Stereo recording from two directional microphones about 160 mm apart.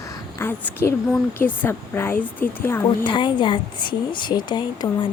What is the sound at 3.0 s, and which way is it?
Speech, 30° left (ahead or behind).